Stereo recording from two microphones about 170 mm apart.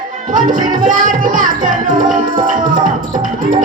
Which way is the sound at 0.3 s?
50° right (ahead or behind).